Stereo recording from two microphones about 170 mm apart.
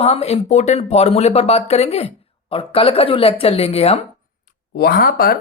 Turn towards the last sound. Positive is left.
turn(degrees=65)  # may be behind; listen again after turning